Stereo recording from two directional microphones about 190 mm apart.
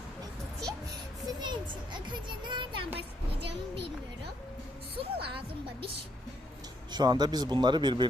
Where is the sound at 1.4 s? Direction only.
25° right (ahead or behind).